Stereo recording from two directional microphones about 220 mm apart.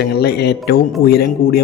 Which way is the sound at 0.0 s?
45° left (ahead or behind).